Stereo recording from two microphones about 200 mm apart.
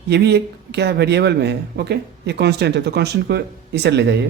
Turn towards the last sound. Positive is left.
turn(degrees=-60)  # may be behind; listen again after turning